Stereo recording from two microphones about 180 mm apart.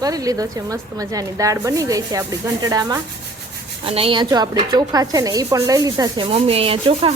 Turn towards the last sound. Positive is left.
turn(degrees=-30)  # may be behind; listen again after turning